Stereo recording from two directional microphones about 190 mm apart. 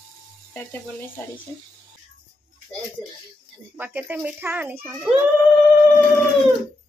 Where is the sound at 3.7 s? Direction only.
10° right (ahead or behind).